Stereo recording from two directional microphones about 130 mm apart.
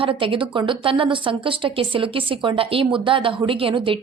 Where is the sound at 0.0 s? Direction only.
45° right (ahead or behind).